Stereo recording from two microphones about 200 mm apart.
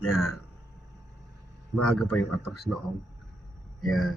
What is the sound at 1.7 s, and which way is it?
Speech, 5° left (ahead or behind).